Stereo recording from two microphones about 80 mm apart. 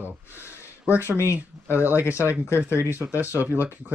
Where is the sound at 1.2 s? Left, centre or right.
Left.